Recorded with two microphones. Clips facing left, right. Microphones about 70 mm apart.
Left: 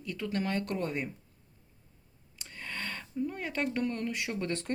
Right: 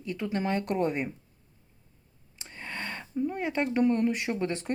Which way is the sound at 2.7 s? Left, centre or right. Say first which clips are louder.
Right 3 dB; centre.